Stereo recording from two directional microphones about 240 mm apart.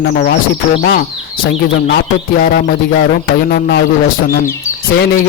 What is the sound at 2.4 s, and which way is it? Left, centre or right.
Speech, left.